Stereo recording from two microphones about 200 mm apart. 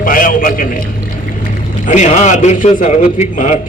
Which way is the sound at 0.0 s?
45° left (ahead or behind).